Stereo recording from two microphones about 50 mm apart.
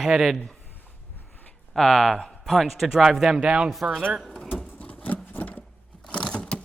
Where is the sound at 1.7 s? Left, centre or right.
Centre.